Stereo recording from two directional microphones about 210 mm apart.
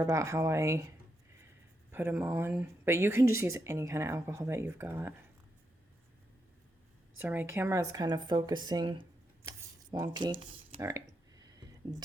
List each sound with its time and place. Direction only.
0.0 s speech: 15° right (ahead or behind)
7.2 s speech: 10° right (ahead or behind)